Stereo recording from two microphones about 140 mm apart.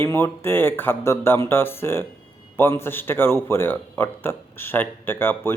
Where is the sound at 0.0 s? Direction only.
15° left (ahead or behind).